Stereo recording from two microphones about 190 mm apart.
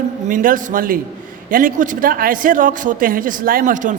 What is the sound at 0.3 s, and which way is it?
A man's voice, 45° right (ahead or behind).